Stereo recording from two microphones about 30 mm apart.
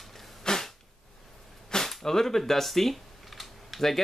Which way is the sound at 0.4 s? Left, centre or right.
Left.